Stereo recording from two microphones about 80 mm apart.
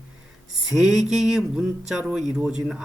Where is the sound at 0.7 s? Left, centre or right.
Centre.